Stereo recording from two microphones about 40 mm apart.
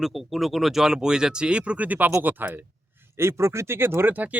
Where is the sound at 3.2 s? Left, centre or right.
Right.